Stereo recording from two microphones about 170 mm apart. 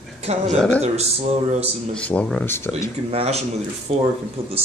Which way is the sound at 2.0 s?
5° left (ahead or behind).